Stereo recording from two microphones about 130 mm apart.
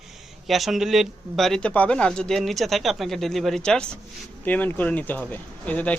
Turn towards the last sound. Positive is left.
turn(degrees=10)  # may be behind; listen again after turning